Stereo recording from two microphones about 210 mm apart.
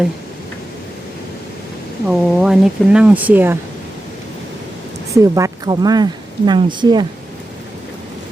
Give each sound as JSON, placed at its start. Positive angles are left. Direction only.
{"t": 2.0, "sound": "speech", "side_deg": -5}
{"t": 5.1, "sound": "speech", "side_deg": -15}